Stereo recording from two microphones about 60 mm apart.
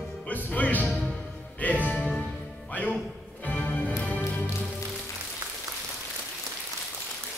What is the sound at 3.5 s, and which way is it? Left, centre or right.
Music, left.